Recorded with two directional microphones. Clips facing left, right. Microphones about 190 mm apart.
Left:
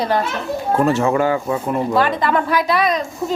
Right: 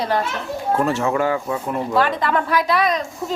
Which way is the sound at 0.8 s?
15° left (ahead or behind).